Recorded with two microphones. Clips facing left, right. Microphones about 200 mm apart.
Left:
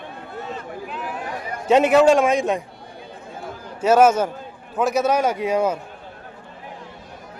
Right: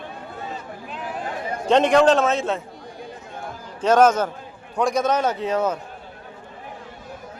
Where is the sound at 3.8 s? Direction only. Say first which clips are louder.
Left 1 dB; 10° left (ahead or behind).